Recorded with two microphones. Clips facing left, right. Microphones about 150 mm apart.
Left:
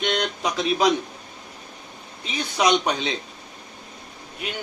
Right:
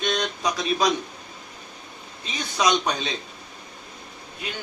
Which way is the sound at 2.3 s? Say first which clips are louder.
Left 2 dB; 15° left (ahead or behind).